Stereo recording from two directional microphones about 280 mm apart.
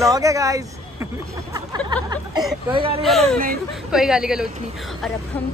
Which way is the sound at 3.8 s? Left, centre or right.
Centre.